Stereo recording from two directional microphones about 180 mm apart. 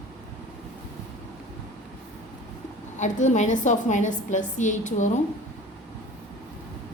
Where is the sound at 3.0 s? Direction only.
40° left (ahead or behind).